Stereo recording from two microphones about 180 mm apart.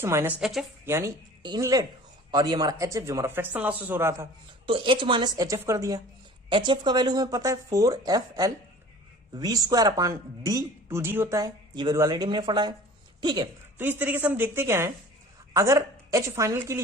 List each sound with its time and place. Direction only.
0.0 s speech: 15° right (ahead or behind)
0.9 s a woman's voice: 15° right (ahead or behind)
4.6 s a woman's voice: 30° right (ahead or behind)
13.7 s speech: 10° right (ahead or behind)